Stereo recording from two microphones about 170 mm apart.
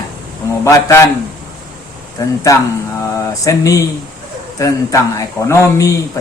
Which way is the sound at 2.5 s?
20° left (ahead or behind).